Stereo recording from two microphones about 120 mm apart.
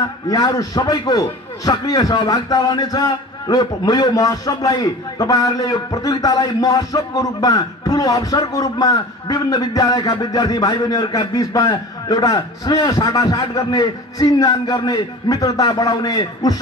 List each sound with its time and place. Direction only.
0.3 s a man's voice: 30° left (ahead or behind)